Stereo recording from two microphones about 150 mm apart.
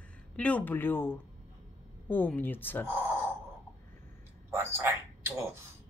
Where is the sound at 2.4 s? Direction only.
15° left (ahead or behind).